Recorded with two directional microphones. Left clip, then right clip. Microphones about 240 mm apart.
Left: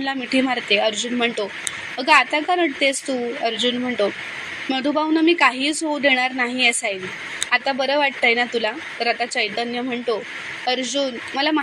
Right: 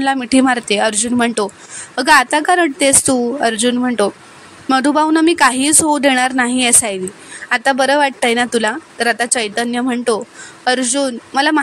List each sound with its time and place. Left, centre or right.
0.0 s speech: right